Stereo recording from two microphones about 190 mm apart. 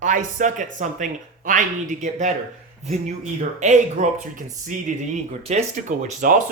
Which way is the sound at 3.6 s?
40° right (ahead or behind).